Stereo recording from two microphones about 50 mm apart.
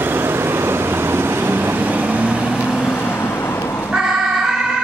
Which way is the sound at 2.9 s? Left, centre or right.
Left.